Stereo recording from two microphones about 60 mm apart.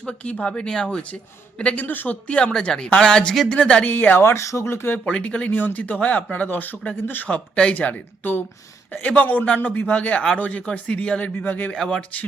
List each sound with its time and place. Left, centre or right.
0.0 s speech: centre
1.8 s speech: left
3.9 s speech: left
4.2 s speech: left
5.0 s speech: centre
5.5 s speech: left
7.3 s speech: centre